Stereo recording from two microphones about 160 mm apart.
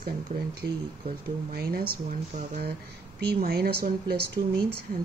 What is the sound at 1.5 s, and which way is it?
Speech, 70° right (ahead or behind).